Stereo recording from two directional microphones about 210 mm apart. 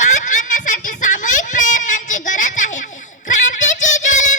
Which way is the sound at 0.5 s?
40° left (ahead or behind).